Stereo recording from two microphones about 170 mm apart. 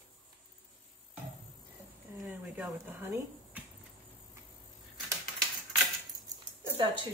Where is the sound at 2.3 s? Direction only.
10° right (ahead or behind).